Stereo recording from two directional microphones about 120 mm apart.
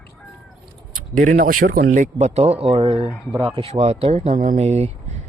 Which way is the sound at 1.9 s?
85° right.